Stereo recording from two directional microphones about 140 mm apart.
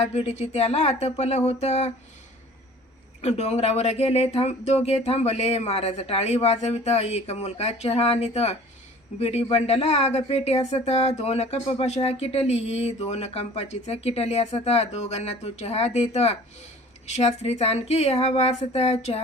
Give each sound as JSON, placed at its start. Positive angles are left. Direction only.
{"t": 0.0, "sound": "speech", "side_deg": 50}
{"t": 3.2, "sound": "speech", "side_deg": 50}